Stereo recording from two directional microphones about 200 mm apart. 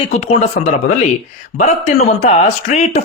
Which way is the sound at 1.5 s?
35° left (ahead or behind).